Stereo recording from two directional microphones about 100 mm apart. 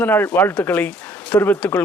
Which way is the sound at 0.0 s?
20° left (ahead or behind).